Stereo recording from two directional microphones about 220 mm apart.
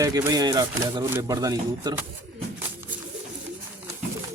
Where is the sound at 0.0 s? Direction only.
15° right (ahead or behind).